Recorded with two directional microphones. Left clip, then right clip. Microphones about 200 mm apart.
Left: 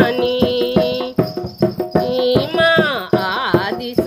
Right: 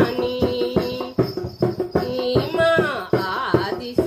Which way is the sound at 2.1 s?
45° left (ahead or behind).